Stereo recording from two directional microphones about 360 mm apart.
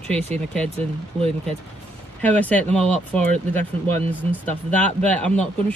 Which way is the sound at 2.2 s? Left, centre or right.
Centre.